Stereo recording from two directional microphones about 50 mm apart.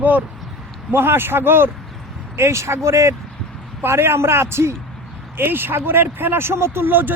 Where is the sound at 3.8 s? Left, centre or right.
Right.